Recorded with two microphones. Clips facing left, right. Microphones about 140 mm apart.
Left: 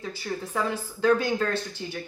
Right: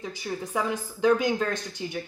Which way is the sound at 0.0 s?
15° right (ahead or behind).